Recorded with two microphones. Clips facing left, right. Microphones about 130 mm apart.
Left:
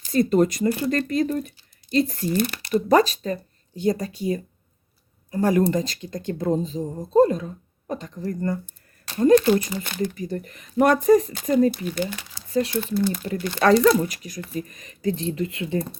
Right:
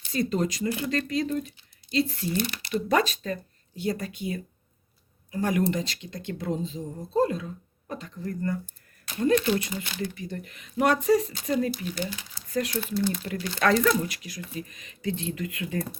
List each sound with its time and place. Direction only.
0.0 s speech: 45° left (ahead or behind)
13.6 s speech: 30° left (ahead or behind)